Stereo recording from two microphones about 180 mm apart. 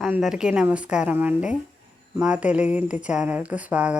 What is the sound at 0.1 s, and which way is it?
Speech, 5° right (ahead or behind).